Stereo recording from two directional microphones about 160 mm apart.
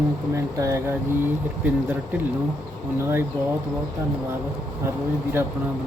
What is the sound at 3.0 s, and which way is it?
Speech, 15° right (ahead or behind).